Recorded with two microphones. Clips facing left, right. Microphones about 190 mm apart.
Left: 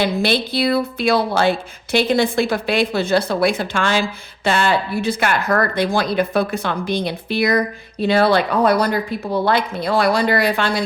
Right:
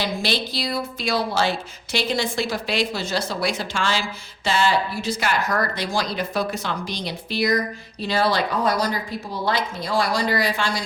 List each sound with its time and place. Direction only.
0.0 s speech: 55° left (ahead or behind)